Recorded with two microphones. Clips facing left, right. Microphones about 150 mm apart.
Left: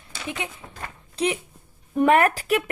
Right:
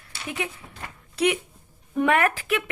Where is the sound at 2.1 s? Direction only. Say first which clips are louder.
Left 4 dB; 40° left (ahead or behind).